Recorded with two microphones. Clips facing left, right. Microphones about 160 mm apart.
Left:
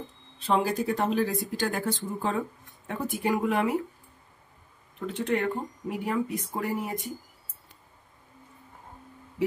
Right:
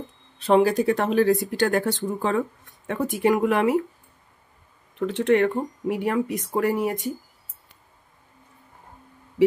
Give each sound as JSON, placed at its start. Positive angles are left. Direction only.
{"t": 0.4, "sound": "speech", "side_deg": -70}
{"t": 4.9, "sound": "speech", "side_deg": -80}